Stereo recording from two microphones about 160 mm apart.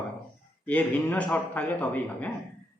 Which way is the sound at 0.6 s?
10° left (ahead or behind).